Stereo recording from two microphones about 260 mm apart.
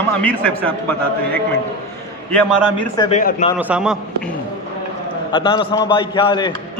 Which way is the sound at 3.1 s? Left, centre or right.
Left.